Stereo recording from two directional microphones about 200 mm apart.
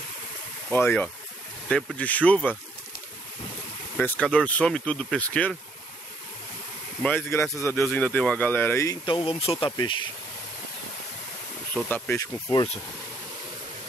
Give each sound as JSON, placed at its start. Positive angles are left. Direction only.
{"t": 0.7, "sound": "speech", "side_deg": 10}
{"t": 3.9, "sound": "speech", "side_deg": 5}
{"t": 7.0, "sound": "speech", "side_deg": 10}
{"t": 9.0, "sound": "speech", "side_deg": 25}
{"t": 11.7, "sound": "speech", "side_deg": 10}